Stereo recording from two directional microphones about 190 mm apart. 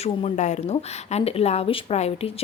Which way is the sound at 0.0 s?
35° left (ahead or behind).